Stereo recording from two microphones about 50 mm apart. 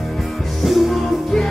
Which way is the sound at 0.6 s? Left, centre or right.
Centre.